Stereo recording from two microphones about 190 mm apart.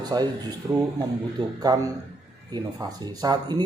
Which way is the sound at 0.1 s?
20° right (ahead or behind).